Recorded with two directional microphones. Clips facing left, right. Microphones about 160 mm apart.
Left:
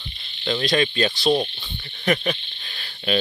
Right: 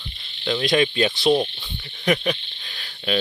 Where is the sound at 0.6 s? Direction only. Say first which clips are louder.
Right 2 dB; 15° right (ahead or behind).